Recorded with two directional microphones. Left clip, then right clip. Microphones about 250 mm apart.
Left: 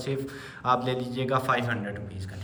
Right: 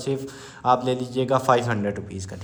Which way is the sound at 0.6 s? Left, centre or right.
Centre.